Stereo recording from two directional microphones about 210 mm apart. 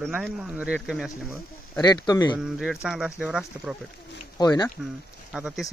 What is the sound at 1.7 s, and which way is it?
Speech, 20° left (ahead or behind).